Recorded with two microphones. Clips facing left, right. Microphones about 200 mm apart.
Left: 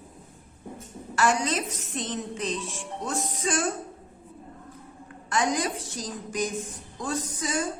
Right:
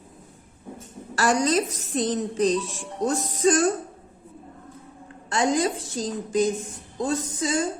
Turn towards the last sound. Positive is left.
turn(degrees=-25)  # may be behind; listen again after turning